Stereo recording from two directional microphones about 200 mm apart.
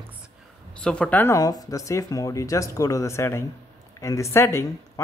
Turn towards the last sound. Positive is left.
turn(degrees=15)  # may be behind; listen again after turning